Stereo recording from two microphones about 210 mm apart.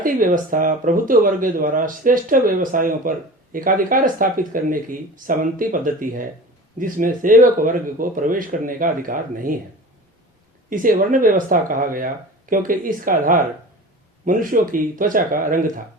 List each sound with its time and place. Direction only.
0.0 s speech: 40° right (ahead or behind)
10.7 s speech: 40° right (ahead or behind)